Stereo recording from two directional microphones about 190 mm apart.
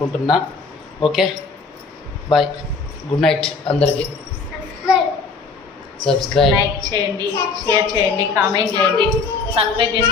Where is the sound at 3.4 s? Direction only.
30° left (ahead or behind).